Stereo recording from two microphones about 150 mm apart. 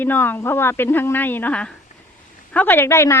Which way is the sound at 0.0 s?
15° left (ahead or behind).